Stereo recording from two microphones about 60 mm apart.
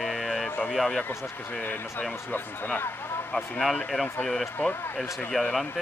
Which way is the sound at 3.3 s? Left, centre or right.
Centre.